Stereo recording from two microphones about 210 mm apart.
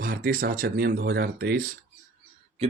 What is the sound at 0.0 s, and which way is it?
Speech, 45° right (ahead or behind).